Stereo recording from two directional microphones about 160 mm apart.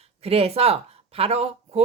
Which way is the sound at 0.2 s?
40° right (ahead or behind).